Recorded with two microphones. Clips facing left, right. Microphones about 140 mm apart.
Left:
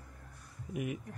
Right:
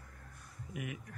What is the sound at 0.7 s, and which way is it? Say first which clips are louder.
Speech: left 6 dB; 30° left (ahead or behind).